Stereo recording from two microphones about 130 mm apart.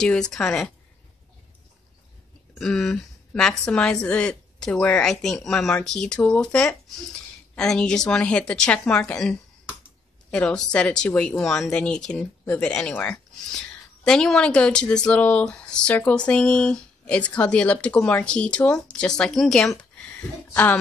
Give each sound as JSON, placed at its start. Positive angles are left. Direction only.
{"t": 0.0, "sound": "a woman's voice", "side_deg": 5}
{"t": 2.6, "sound": "a woman's voice", "side_deg": 5}